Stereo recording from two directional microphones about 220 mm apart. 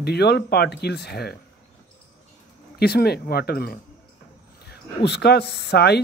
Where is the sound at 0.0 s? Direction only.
45° left (ahead or behind).